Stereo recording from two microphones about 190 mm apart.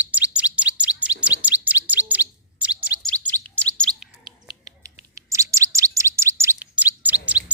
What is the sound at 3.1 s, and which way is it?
Bird, 5° left (ahead or behind).